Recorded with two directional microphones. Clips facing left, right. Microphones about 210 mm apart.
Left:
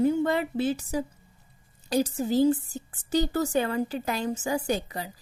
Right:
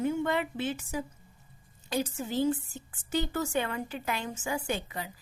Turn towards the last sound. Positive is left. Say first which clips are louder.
# left 5 dB
turn(degrees=35)  # may be behind; listen again after turning